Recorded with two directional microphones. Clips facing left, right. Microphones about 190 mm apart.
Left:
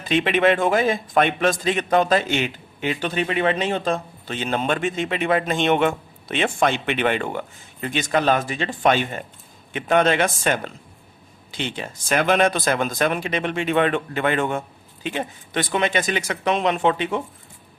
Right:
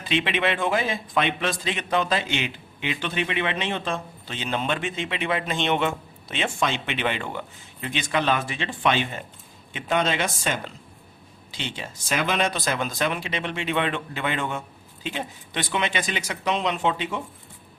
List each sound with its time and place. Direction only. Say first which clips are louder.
0.1 s a man's voice: left 6 dB; 50° left (ahead or behind)